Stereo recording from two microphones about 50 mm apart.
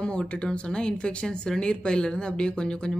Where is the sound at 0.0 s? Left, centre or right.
Left.